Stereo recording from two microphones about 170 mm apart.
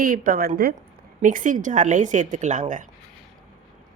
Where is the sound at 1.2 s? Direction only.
50° right (ahead or behind).